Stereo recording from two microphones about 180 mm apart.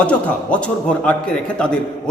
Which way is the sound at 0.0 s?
5° left (ahead or behind).